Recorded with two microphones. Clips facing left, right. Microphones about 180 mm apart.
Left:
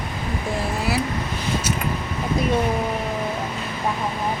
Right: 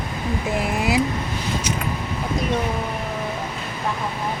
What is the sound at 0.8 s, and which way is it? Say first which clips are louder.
Speech: right 4 dB; 15° right (ahead or behind).